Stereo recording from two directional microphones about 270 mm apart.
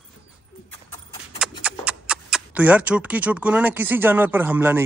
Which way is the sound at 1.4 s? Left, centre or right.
Centre.